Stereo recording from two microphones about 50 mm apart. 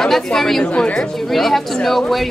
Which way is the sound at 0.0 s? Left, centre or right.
Centre.